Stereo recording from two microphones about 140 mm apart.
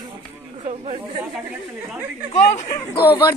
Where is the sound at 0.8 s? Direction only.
45° right (ahead or behind).